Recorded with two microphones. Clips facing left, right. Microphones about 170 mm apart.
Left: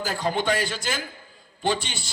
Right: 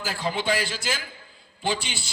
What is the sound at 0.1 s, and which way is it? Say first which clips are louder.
Speech: left 1 dB; 50° left (ahead or behind).